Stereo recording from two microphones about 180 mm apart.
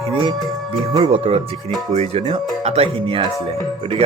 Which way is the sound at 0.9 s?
30° right (ahead or behind).